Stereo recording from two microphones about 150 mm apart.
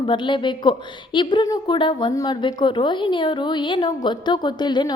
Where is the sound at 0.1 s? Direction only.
30° left (ahead or behind).